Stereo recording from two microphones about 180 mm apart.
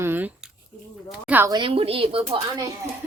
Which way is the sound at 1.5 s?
30° right (ahead or behind).